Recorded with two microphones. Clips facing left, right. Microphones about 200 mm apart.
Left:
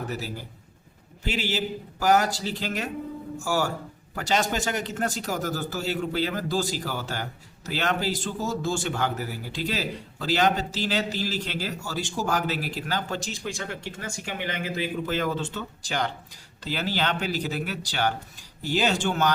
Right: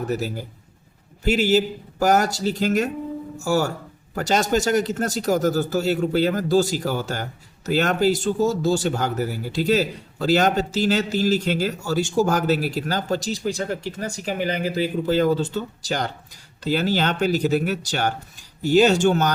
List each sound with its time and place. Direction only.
1.2 s speech: 45° right (ahead or behind)